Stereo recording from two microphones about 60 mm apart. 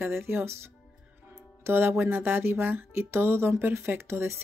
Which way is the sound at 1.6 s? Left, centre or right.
Right.